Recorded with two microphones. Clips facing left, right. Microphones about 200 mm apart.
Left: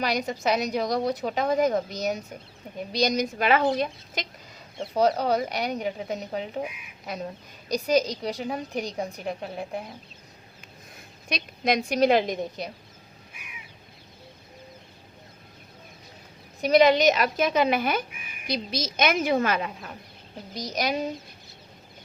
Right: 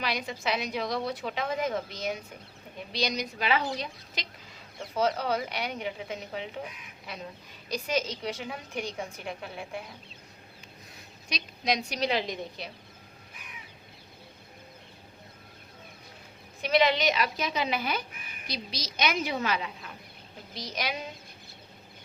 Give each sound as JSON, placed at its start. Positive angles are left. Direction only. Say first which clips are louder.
{"t": 0.0, "sound": "a woman's voice", "louder": "left 6 dB", "side_deg": 45}
{"t": 4.8, "sound": "a woman's voice", "louder": "left 5 dB", "side_deg": 35}
{"t": 10.9, "sound": "a woman's voice", "louder": "left 5 dB", "side_deg": 55}
{"t": 13.3, "sound": "crow", "louder": "even", "side_deg": 10}
{"t": 16.6, "sound": "a woman's voice", "louder": "left 6 dB", "side_deg": 40}